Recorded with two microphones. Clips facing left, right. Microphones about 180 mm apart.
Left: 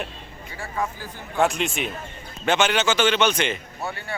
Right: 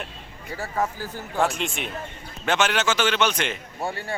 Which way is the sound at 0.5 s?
40° right (ahead or behind).